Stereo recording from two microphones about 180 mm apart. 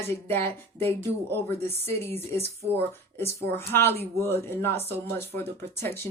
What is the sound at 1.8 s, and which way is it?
Speech, 35° right (ahead or behind).